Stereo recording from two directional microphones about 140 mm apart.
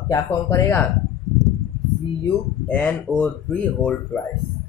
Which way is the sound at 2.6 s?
10° left (ahead or behind).